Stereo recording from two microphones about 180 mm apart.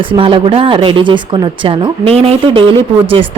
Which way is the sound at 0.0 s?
30° right (ahead or behind).